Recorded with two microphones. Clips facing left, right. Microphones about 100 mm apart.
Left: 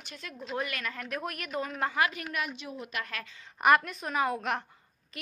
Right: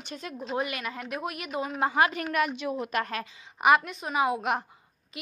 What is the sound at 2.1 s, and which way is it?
Speech, 50° right (ahead or behind).